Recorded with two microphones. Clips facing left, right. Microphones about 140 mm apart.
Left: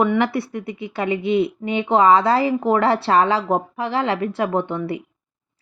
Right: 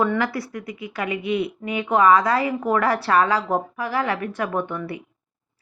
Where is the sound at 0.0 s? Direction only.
25° left (ahead or behind).